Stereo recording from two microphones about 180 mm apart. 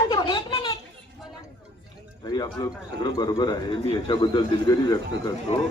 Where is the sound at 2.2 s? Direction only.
20° left (ahead or behind).